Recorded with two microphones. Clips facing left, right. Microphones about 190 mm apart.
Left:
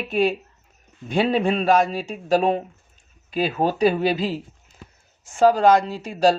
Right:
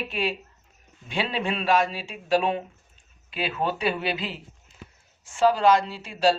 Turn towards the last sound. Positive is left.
turn(degrees=45)  # may be behind; listen again after turning